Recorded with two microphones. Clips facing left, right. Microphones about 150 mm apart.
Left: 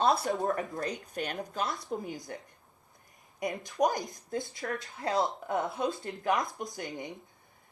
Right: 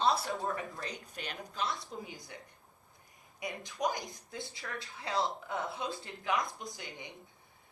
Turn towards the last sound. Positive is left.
turn(degrees=45)  # may be behind; listen again after turning